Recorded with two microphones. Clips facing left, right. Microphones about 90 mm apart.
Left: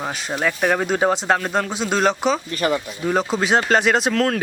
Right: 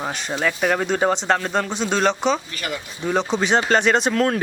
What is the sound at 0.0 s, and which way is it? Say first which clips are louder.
Speech: even; centre (ahead or behind).